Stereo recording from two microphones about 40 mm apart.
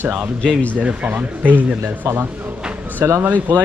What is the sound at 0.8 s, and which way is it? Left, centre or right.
Speech, right.